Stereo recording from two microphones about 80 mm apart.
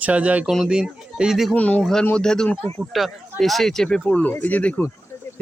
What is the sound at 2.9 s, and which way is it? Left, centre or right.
Speech, centre.